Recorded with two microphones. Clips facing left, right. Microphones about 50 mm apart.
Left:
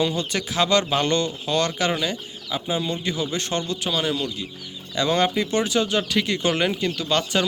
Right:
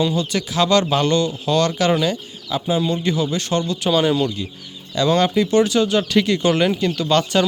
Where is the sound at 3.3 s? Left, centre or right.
Left.